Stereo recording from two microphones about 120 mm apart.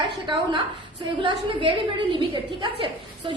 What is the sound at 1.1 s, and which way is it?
A woman's voice, 45° right (ahead or behind).